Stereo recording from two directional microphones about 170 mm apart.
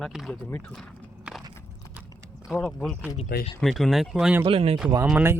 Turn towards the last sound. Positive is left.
turn(degrees=-10)  # may be behind; listen again after turning